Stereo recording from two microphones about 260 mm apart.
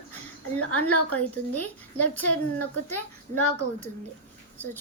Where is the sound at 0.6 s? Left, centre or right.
Left.